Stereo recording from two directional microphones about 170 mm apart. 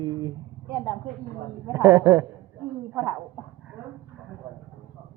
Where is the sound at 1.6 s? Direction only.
20° right (ahead or behind).